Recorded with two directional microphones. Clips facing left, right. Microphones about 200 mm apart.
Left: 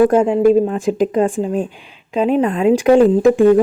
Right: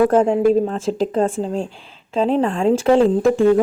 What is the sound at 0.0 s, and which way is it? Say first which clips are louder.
Speech: left 3 dB; 10° left (ahead or behind).